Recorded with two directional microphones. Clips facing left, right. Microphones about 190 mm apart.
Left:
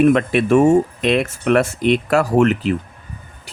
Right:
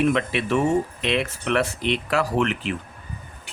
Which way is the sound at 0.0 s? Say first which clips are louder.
Left 8 dB; 50° left (ahead or behind).